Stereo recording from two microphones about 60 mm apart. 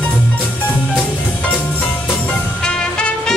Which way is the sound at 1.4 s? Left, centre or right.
Left.